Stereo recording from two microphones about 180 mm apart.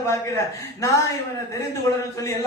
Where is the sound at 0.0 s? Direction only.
15° left (ahead or behind).